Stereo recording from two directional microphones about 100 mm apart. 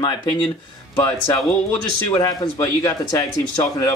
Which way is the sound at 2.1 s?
30° left (ahead or behind).